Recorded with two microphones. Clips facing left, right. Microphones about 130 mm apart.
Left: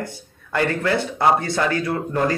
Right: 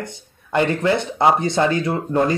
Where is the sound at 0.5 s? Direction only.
20° right (ahead or behind).